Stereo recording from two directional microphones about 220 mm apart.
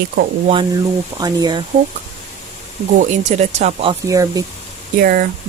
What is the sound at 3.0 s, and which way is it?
Speech, 30° right (ahead or behind).